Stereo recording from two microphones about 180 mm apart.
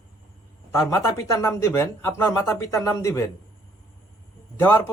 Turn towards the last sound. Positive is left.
turn(degrees=10)  # may be behind; listen again after turning